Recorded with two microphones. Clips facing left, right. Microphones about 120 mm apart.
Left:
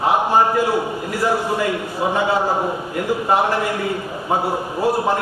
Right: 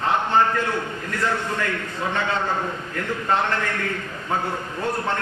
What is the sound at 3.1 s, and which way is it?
A man's voice, 10° left (ahead or behind).